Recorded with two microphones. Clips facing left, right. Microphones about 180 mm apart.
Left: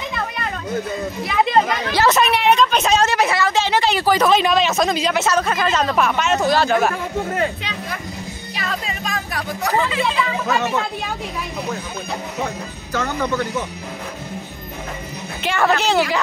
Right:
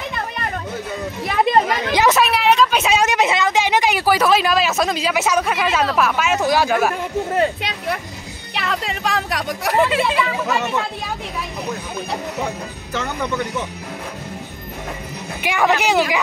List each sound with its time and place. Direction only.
1.2 s speech: 45° right (ahead or behind)
2.0 s a woman's voice: 10° right (ahead or behind)
8.5 s speech: 70° right (ahead or behind)
15.4 s speech: 15° right (ahead or behind)